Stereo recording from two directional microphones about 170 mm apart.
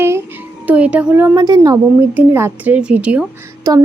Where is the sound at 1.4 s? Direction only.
25° right (ahead or behind); by 3.2 s 10° right (ahead or behind).